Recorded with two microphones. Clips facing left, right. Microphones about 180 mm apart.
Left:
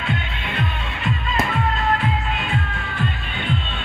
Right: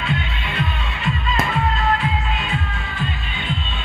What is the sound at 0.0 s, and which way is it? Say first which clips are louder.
Music: right 1 dB; 50° left (ahead or behind).